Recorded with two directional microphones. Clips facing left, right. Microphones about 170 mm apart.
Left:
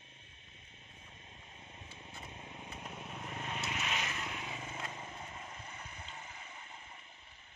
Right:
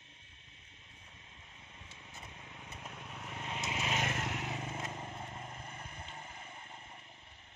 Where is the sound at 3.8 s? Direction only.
45° right (ahead or behind).